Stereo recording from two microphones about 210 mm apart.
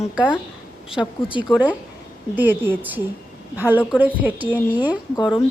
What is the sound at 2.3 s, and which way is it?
A woman's voice, 10° right (ahead or behind).